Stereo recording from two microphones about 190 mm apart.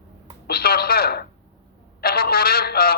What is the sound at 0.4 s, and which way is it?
A man's voice, 55° left (ahead or behind).